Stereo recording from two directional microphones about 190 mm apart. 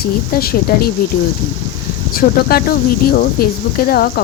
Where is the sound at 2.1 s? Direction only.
50° left (ahead or behind).